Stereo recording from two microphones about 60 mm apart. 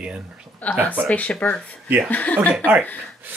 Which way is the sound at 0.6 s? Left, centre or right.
Left.